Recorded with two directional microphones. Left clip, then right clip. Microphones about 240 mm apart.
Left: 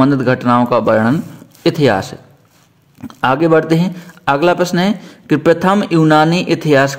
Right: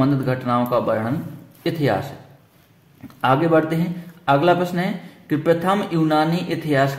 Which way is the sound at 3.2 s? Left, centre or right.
Left.